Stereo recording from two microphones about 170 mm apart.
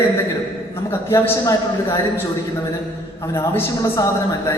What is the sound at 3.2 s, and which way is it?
Speech, 15° left (ahead or behind).